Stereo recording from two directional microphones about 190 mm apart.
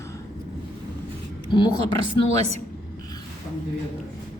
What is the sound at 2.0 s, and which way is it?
Speech, 35° right (ahead or behind).